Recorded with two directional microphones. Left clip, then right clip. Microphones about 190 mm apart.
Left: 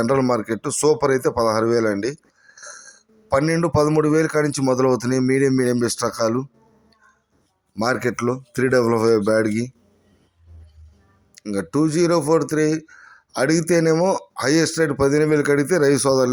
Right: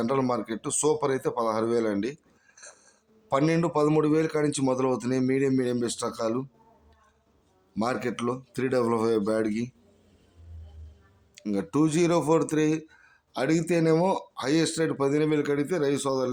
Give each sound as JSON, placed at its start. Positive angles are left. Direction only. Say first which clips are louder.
{"t": 0.0, "sound": "speech", "louder": "left 8 dB", "side_deg": 20}
{"t": 2.5, "sound": "a sound", "louder": "left 11 dB", "side_deg": 15}
{"t": 3.8, "sound": "speech", "louder": "left 7 dB", "side_deg": 20}
{"t": 7.8, "sound": "speech", "louder": "left 7 dB", "side_deg": 20}
{"t": 11.3, "sound": "speech", "louder": "left 5 dB", "side_deg": 15}